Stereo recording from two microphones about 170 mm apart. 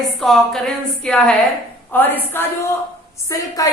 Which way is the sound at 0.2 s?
Centre (ahead or behind).